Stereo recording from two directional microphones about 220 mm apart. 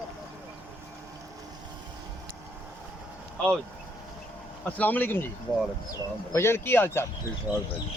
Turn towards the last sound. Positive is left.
turn(degrees=10)  # may be behind; listen again after turning